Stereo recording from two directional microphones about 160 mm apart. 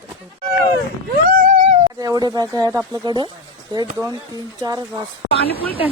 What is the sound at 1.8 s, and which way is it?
Speech, 25° right (ahead or behind).